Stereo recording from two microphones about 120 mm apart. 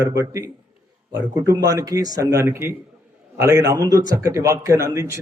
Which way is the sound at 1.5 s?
30° right (ahead or behind).